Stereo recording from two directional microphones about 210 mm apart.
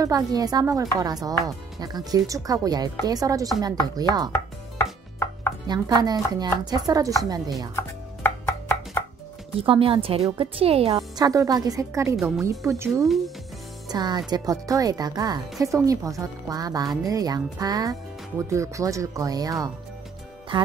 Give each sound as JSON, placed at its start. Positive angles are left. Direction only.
{"t": 0.0, "sound": "speech", "side_deg": -15}
{"t": 5.7, "sound": "speech", "side_deg": -20}
{"t": 7.7, "sound": "chopping", "side_deg": 10}
{"t": 9.6, "sound": "speech", "side_deg": -25}
{"t": 11.0, "sound": "speech", "side_deg": -15}